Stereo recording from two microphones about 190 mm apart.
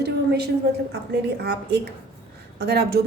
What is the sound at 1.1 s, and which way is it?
A woman's voice, 60° right (ahead or behind).